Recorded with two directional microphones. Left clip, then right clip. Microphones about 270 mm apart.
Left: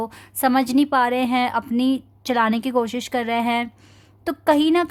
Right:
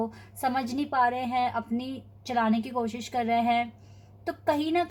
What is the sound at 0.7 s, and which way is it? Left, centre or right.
A woman's voice, left.